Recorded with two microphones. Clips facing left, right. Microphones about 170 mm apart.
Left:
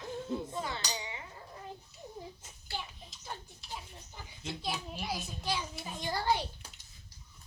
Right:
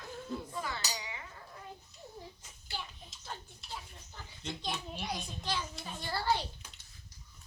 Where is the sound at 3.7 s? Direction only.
10° left (ahead or behind).